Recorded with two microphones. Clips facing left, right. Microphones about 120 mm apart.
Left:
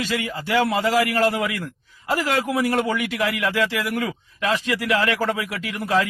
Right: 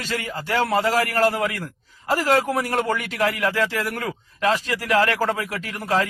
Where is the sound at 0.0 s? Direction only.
40° right (ahead or behind).